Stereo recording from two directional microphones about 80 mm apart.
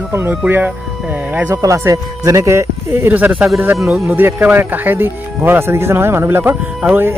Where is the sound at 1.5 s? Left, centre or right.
Right.